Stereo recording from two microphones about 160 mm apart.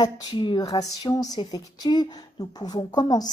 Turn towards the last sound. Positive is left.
turn(degrees=25)  # may be behind; listen again after turning